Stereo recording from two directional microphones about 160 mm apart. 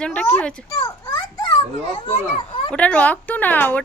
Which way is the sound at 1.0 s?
25° left (ahead or behind).